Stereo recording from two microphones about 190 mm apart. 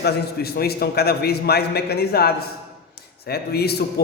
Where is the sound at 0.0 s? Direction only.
55° left (ahead or behind).